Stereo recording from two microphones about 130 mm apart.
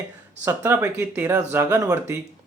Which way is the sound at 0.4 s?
20° right (ahead or behind).